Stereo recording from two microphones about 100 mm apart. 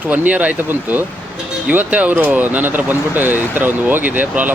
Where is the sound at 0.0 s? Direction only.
15° right (ahead or behind).